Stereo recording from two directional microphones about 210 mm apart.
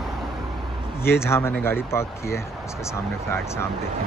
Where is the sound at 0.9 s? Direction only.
10° left (ahead or behind).